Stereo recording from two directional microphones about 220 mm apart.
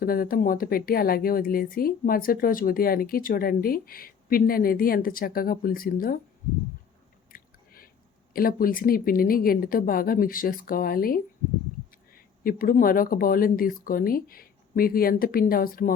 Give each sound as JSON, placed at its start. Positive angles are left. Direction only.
{"t": 0.0, "sound": "a woman's voice", "side_deg": 40}
{"t": 7.3, "sound": "chewing", "side_deg": 40}
{"t": 8.3, "sound": "a woman's voice", "side_deg": 40}